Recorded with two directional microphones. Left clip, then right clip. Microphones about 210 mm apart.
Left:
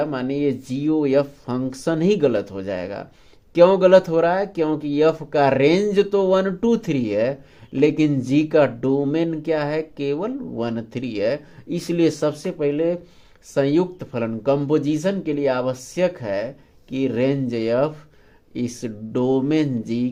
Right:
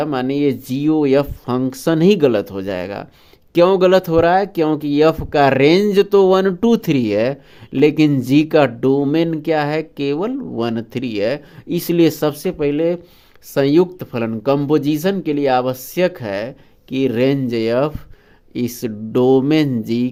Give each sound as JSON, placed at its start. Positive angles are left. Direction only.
{"t": 0.0, "sound": "speech", "side_deg": -40}